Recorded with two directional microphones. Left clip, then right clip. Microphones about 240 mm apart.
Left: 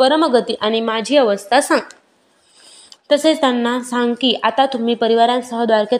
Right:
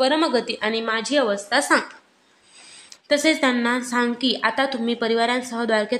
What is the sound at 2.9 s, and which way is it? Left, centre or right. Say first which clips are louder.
A woman's voice: left 5 dB; centre.